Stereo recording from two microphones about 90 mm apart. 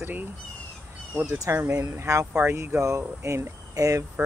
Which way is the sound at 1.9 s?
35° right (ahead or behind).